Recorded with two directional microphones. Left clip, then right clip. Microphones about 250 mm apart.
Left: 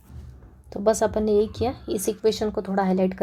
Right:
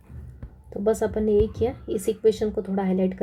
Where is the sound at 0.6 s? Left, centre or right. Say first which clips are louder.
Left 2 dB; centre.